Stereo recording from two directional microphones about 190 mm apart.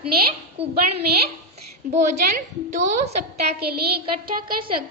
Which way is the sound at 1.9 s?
40° right (ahead or behind).